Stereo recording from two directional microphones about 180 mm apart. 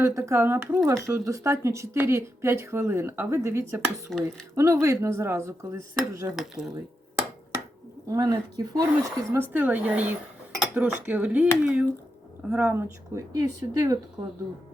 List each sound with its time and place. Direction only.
0.0 s speech: 15° right (ahead or behind)
6.3 s speech: centre (ahead or behind)
8.1 s speech: 20° right (ahead or behind)